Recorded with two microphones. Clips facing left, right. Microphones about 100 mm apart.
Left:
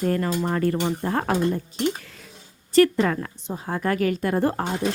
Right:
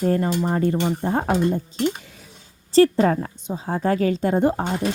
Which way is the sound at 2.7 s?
35° right (ahead or behind).